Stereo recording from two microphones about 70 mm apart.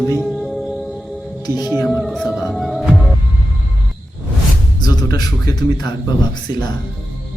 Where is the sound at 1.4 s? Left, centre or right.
Left.